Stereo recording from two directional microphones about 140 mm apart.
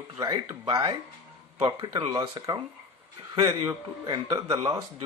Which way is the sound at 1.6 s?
30° right (ahead or behind).